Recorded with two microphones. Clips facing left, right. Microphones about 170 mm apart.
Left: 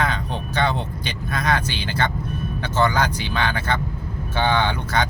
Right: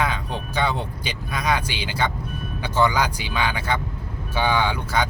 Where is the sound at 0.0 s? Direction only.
10° right (ahead or behind).